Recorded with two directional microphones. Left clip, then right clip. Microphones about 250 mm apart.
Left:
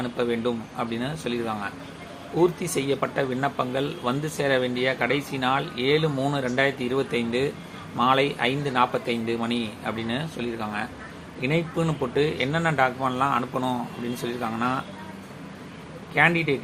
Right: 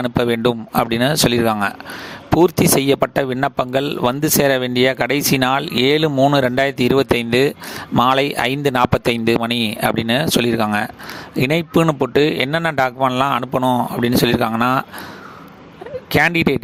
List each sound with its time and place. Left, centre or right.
0.0 s speech: right
16.1 s speech: right